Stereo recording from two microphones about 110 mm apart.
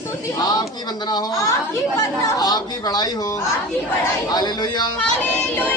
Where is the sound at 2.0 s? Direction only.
35° left (ahead or behind).